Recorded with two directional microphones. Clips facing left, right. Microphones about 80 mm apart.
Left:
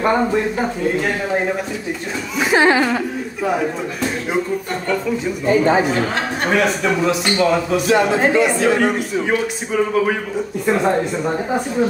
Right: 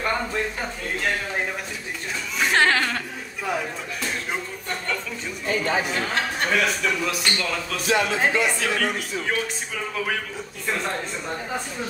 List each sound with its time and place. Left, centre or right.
0.0 s a man's voice: left
2.3 s speech: centre
5.5 s a man's voice: left